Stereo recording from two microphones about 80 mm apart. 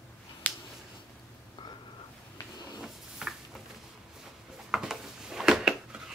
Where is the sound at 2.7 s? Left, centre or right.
Centre.